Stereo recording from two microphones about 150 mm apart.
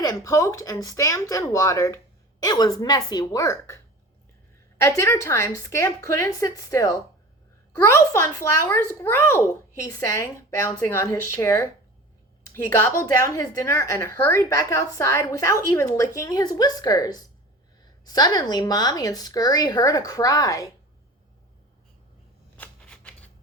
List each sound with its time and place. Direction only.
0.0 s a woman's voice: 25° left (ahead or behind)
4.8 s a woman's voice: 20° left (ahead or behind)
22.5 s shuffling cards: 10° left (ahead or behind)